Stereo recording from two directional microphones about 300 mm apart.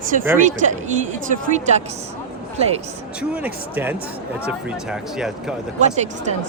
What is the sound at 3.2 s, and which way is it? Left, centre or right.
Speech, centre.